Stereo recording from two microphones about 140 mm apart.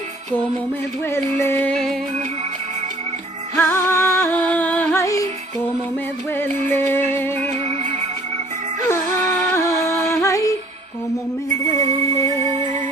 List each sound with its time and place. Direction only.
1.4 s music: 15° left (ahead or behind)
3.5 s music: 20° left (ahead or behind)
6.3 s music: 15° left (ahead or behind)
7.6 s music: 55° right (ahead or behind)
9.5 s music: 20° left (ahead or behind)
11.6 s music: 25° left (ahead or behind)